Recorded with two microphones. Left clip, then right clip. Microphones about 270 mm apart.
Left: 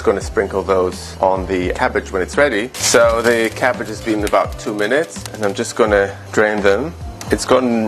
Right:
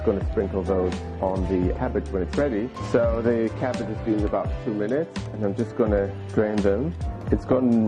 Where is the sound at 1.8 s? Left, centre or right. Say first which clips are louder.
Left 9 dB; centre.